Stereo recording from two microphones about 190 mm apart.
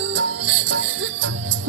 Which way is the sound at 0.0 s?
70° right (ahead or behind).